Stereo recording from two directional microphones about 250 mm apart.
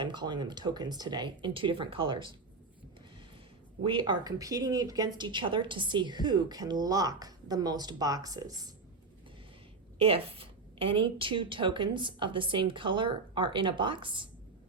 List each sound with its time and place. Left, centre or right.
0.0 s speech: centre
3.8 s speech: centre
10.0 s a woman's voice: right